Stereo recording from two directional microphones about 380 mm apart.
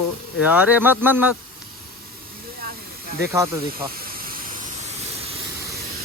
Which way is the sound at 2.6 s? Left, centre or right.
Right.